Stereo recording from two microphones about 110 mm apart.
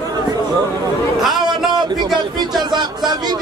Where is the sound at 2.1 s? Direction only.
40° right (ahead or behind).